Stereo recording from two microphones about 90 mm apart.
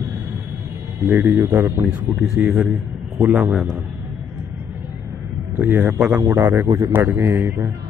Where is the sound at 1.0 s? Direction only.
25° right (ahead or behind).